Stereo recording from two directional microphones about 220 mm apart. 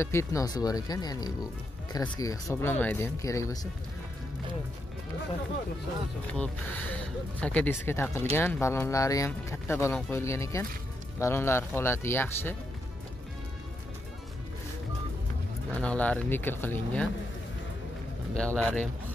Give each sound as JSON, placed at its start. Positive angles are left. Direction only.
{"t": 0.0, "sound": "speech", "side_deg": 10}
{"t": 6.3, "sound": "speech", "side_deg": 5}
{"t": 15.8, "sound": "speech", "side_deg": 5}
{"t": 18.3, "sound": "speech", "side_deg": 5}